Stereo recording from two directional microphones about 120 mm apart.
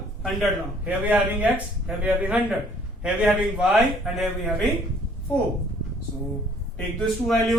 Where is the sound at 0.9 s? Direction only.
15° right (ahead or behind).